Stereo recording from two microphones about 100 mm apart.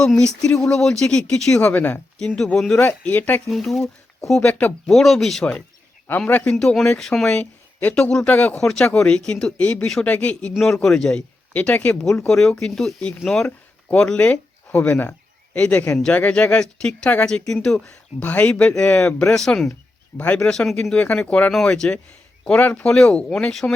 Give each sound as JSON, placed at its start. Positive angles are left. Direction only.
{"t": 0.0, "sound": "speech", "side_deg": 5}
{"t": 2.1, "sound": "speech", "side_deg": 5}
{"t": 2.8, "sound": "speech", "side_deg": 15}
{"t": 3.5, "sound": "speech", "side_deg": 0}
{"t": 4.9, "sound": "speech", "side_deg": 0}
{"t": 6.1, "sound": "speech", "side_deg": 15}
{"t": 15.5, "sound": "speech", "side_deg": 10}
{"t": 19.4, "sound": "speech", "side_deg": 5}